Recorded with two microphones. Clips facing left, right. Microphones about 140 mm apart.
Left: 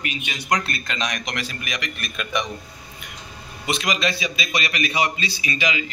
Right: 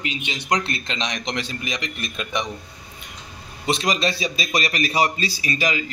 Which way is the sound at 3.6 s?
35° right (ahead or behind).